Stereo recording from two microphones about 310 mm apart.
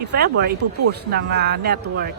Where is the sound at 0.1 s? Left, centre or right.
Right.